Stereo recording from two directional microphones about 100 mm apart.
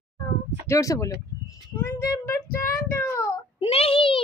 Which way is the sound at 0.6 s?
30° left (ahead or behind).